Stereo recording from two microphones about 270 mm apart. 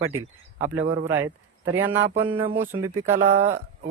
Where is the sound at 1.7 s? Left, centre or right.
Centre.